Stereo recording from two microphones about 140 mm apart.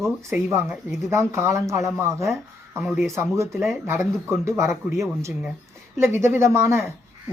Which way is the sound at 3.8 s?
20° right (ahead or behind).